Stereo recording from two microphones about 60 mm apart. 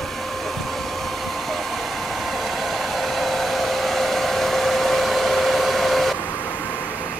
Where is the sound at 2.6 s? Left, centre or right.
Centre.